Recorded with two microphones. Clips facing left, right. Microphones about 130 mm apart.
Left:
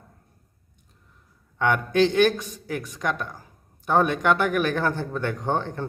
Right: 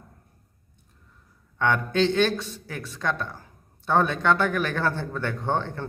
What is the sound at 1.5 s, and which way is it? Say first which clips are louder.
Speech: left 2 dB; 15° left (ahead or behind).